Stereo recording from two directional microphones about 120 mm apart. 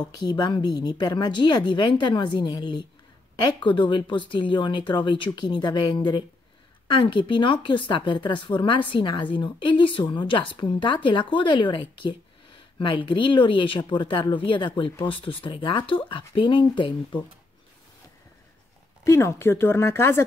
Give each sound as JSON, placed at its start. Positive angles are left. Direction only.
{"t": 0.1, "sound": "a woman's voice", "side_deg": 35}
{"t": 19.0, "sound": "speech", "side_deg": 25}